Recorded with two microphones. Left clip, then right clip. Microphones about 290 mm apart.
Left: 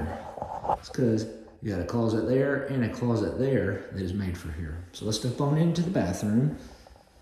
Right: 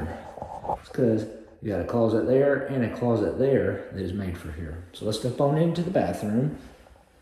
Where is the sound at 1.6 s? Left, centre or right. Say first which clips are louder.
Right 5 dB; centre.